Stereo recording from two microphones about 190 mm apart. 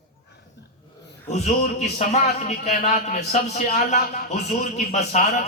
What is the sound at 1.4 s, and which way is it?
Speech, 35° left (ahead or behind).